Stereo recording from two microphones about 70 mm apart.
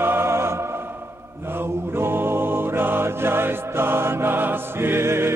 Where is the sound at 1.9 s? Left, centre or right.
Right.